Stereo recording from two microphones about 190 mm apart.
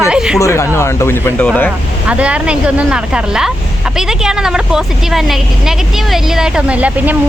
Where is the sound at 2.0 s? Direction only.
5° right (ahead or behind).